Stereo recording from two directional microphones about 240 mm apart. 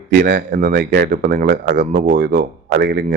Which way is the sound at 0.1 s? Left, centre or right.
Right.